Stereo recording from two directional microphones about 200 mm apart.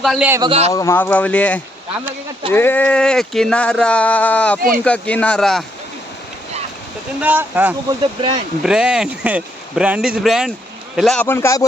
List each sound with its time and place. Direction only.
0.0 s speech: centre (ahead or behind)
0.3 s speech: 15° right (ahead or behind)
0.7 s speech: 15° left (ahead or behind)
7.2 s speech: 10° right (ahead or behind); by 11.6 s 15° left (ahead or behind)